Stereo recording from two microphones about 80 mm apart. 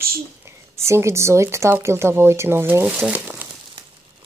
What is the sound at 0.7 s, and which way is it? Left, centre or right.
Speech, right.